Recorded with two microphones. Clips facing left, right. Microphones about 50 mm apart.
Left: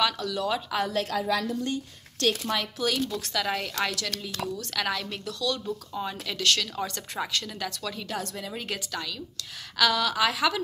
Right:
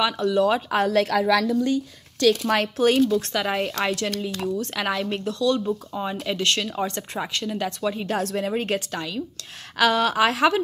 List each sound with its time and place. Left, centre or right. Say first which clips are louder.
0.0 s speech: right 7 dB; right
0.8 s a woman's voice: right 7 dB; right
2.4 s speech: right 8 dB; right
3.3 s speech: right 4 dB; right
4.1 s speech: right 6 dB; right
8.4 s speech: right 10 dB; right
8.9 s speech: right 5 dB; right